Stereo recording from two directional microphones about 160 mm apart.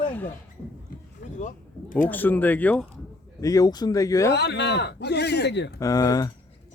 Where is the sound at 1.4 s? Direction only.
55° left (ahead or behind).